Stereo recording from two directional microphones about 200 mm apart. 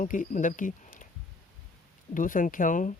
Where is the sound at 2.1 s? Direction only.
40° left (ahead or behind).